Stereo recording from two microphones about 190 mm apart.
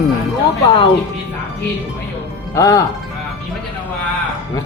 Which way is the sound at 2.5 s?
15° left (ahead or behind).